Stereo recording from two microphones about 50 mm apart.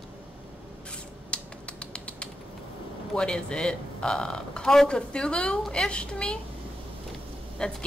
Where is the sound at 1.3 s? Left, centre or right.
Left.